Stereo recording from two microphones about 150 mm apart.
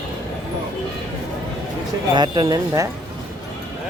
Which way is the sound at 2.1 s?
30° right (ahead or behind).